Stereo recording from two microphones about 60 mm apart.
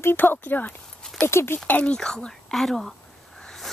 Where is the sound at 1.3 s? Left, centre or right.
Left.